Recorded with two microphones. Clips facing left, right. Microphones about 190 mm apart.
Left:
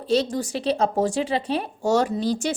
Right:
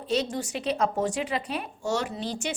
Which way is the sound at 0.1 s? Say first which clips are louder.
Left 5 dB; 30° left (ahead or behind).